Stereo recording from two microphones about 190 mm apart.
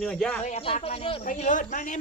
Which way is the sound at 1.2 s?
40° left (ahead or behind).